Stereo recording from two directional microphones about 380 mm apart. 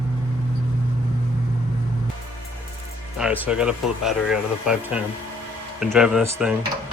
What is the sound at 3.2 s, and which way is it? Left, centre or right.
Speech, centre.